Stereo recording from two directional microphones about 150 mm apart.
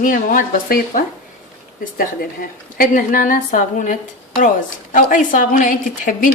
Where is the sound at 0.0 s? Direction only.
65° left (ahead or behind).